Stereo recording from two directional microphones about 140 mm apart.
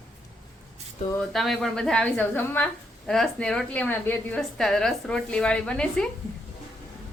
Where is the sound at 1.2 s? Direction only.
Centre (ahead or behind).